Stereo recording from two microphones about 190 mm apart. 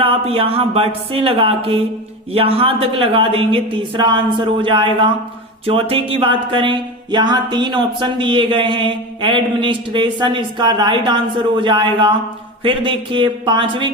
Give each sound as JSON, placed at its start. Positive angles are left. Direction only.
{"t": 0.0, "sound": "music", "side_deg": -30}